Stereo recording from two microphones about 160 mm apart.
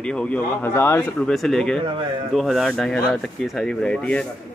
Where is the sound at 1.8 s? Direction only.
30° right (ahead or behind).